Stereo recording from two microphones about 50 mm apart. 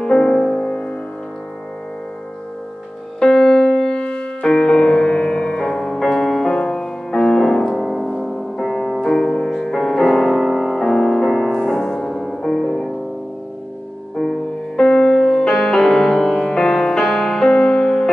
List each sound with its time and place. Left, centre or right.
0.0 s music: centre
3.2 s music: centre
9.0 s music: centre
11.7 s music: centre
14.8 s music: centre